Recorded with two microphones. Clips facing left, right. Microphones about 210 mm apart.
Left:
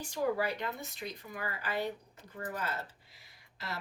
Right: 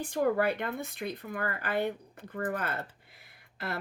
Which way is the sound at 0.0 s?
55° right (ahead or behind).